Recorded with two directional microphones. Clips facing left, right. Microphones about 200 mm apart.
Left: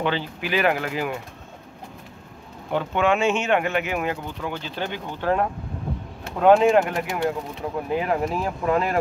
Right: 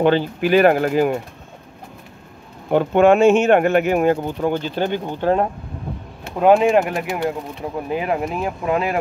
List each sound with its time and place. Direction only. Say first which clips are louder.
0.0 s speech: right 9 dB; 50° right (ahead or behind)
2.7 s speech: right 8 dB; 50° right (ahead or behind)
5.0 s speech: right 1 dB; 25° right (ahead or behind)
6.3 s speech: right 2 dB; 15° right (ahead or behind)